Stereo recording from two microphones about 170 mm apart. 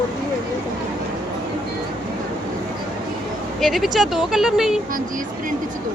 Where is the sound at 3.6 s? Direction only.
Centre (ahead or behind).